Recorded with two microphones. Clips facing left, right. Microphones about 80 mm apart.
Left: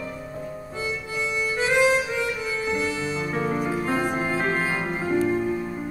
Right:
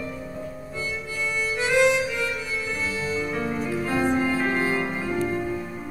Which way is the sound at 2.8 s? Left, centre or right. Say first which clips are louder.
Left 1 dB; left.